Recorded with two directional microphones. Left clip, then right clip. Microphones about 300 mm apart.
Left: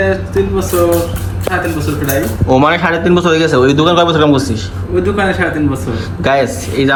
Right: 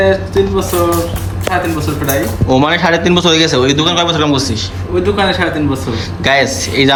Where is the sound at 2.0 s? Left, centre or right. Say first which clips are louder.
Left 1 dB; centre.